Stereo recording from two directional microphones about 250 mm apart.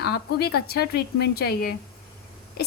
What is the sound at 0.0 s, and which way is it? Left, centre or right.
A woman's voice, left.